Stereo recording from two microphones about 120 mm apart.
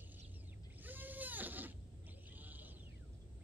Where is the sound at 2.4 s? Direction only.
15° right (ahead or behind).